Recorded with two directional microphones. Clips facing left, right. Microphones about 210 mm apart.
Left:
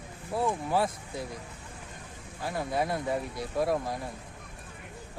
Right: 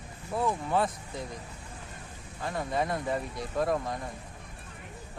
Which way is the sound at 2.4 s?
5° left (ahead or behind).